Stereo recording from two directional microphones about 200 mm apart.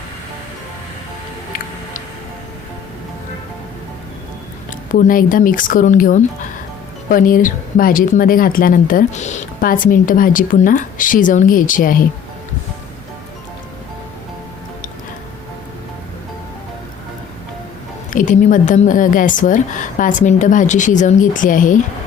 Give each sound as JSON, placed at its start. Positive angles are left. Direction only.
{"t": 4.9, "sound": "a woman's voice", "side_deg": 45}
{"t": 18.1, "sound": "a woman's voice", "side_deg": 40}